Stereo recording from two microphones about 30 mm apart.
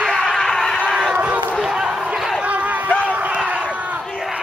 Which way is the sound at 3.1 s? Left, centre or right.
Right.